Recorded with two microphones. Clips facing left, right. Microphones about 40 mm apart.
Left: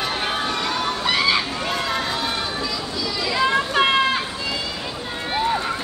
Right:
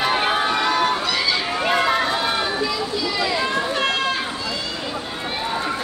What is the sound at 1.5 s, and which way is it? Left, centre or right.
Run, right.